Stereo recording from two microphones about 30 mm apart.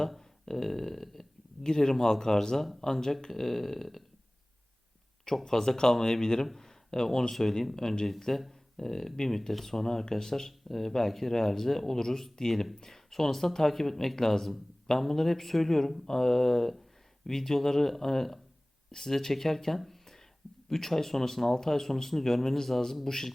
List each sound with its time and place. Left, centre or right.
0.4 s speech: centre
1.6 s speech: centre
5.5 s speech: centre
14.2 s speech: centre
19.8 s a sound: centre
20.7 s speech: centre